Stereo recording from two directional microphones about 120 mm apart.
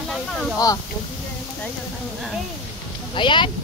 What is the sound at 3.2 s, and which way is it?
Speech, 40° left (ahead or behind).